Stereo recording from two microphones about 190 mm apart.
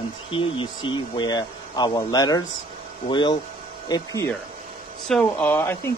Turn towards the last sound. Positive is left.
turn(degrees=10)  # may be behind; listen again after turning